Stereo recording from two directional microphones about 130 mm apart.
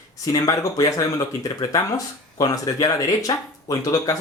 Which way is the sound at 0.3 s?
25° left (ahead or behind).